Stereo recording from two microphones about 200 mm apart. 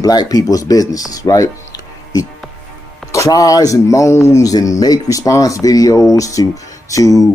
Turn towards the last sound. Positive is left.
turn(degrees=15)  # may be behind; listen again after turning